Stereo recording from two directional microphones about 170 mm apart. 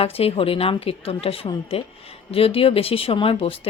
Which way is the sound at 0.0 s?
35° left (ahead or behind).